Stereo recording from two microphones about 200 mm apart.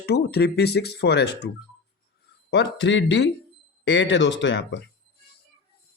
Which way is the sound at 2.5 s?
60° left (ahead or behind).